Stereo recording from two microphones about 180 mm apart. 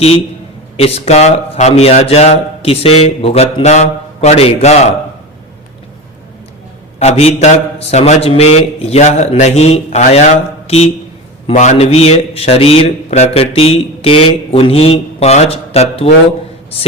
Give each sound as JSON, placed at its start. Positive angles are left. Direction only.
{"t": 0.8, "sound": "speech", "side_deg": 35}
{"t": 7.0, "sound": "speech", "side_deg": 35}